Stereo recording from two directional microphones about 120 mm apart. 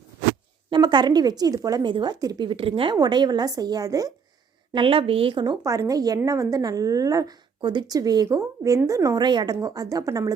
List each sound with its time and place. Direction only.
0.7 s a woman's voice: 40° right (ahead or behind)
4.7 s a woman's voice: 45° right (ahead or behind)
5.6 s a woman's voice: 25° right (ahead or behind)